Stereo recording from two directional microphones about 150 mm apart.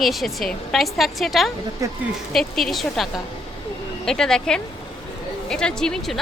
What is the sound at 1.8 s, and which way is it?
Speech, 20° right (ahead or behind).